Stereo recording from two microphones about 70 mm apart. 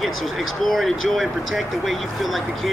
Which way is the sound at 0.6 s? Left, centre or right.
Centre.